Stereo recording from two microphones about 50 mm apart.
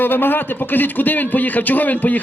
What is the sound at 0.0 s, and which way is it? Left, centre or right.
A man's voice, left.